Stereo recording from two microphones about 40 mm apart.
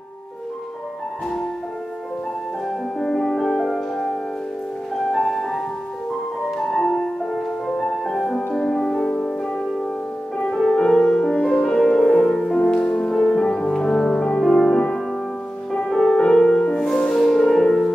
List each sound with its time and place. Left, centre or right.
3.0 s music: centre
6.7 s music: centre
10.7 s music: centre
12.6 s music: left; by 14.8 s centre
15.8 s music: centre